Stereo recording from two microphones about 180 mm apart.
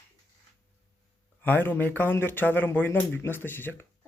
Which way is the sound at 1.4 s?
10° left (ahead or behind).